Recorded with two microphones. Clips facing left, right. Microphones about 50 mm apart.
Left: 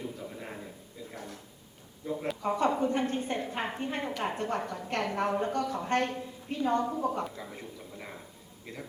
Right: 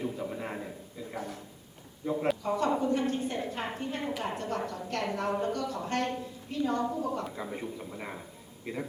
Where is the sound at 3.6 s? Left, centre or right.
Centre.